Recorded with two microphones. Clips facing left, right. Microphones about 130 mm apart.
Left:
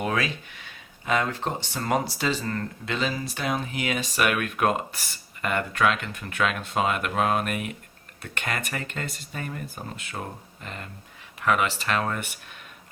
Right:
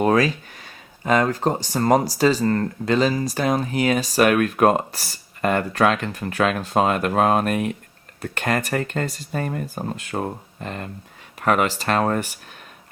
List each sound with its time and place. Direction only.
0.0 s speech: 40° right (ahead or behind)